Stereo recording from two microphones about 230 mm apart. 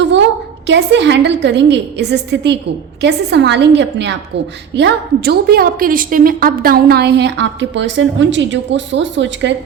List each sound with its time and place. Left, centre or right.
0.7 s a woman's voice: right